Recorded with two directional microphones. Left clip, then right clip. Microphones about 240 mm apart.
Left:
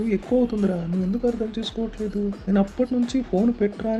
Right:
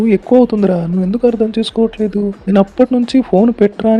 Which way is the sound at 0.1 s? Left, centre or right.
Right.